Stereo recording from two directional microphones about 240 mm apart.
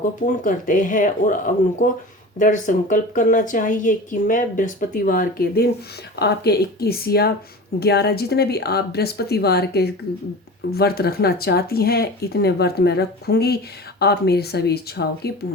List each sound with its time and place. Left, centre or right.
0.4 s a woman's voice: left